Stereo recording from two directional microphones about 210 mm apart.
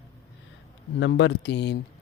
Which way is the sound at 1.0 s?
60° left (ahead or behind).